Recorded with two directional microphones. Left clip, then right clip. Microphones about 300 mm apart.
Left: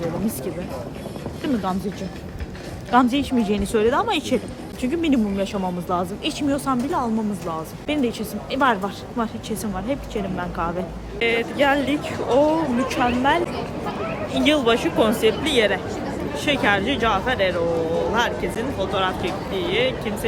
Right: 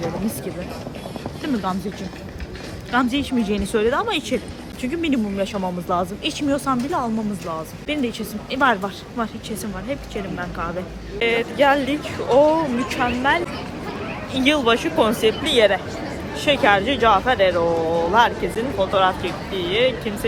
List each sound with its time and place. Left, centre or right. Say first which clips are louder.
2.9 s speech: left 2 dB; centre
11.2 s speech: right 2 dB; centre